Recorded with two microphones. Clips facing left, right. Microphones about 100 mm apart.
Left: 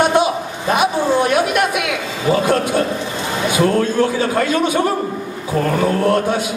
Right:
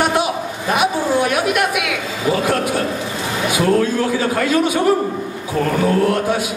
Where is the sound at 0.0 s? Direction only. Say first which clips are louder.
Left 3 dB; 30° left (ahead or behind).